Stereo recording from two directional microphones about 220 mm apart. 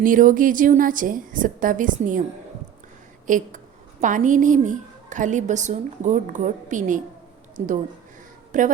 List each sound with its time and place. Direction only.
0.0 s a woman's voice: 40° right (ahead or behind)
3.2 s a woman's voice: 35° right (ahead or behind)
8.5 s a woman's voice: 35° right (ahead or behind)